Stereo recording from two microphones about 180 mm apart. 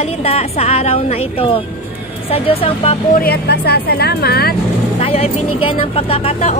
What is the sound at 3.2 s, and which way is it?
Speech, 60° left (ahead or behind).